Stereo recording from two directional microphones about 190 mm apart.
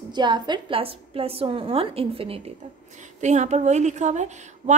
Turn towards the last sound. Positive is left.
turn(degrees=-40)  # may be behind; listen again after turning